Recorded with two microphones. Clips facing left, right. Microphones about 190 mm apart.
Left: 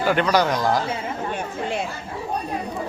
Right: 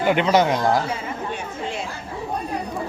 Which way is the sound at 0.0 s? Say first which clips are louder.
Right 2 dB; 20° right (ahead or behind).